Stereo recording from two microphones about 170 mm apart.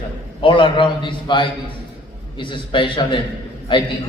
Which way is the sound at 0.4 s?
30° left (ahead or behind).